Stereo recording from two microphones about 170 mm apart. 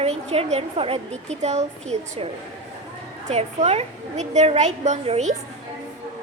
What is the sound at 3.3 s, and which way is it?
A woman's voice, 40° right (ahead or behind).